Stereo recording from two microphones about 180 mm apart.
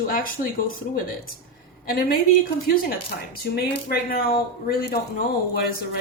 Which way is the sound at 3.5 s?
60° left (ahead or behind).